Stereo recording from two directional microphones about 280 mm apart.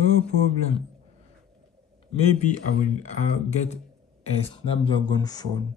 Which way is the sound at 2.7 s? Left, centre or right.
Left.